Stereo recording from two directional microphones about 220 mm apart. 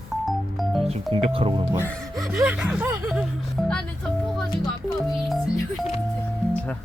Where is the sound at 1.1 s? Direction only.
25° right (ahead or behind).